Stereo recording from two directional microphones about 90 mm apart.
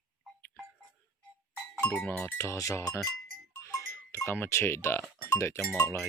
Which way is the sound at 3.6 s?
35° left (ahead or behind).